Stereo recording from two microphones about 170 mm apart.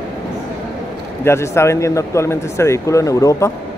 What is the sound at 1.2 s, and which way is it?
Speech, 15° left (ahead or behind).